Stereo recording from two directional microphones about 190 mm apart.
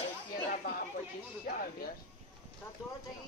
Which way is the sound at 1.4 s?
50° left (ahead or behind).